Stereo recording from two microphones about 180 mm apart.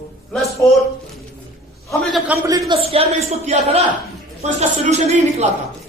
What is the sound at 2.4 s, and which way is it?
A woman's voice, 20° right (ahead or behind).